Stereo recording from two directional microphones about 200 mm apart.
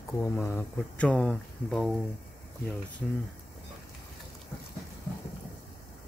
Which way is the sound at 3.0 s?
Centre (ahead or behind).